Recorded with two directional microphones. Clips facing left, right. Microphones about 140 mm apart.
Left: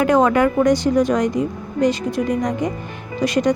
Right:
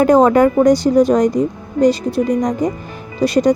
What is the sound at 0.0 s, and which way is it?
Speech, 35° right (ahead or behind).